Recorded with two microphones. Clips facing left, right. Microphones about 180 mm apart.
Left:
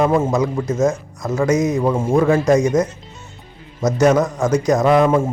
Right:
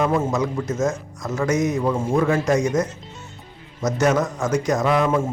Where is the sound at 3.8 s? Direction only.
35° left (ahead or behind).